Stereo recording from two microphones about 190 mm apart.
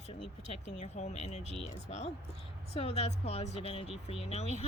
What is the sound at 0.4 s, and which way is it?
Speech, 35° left (ahead or behind).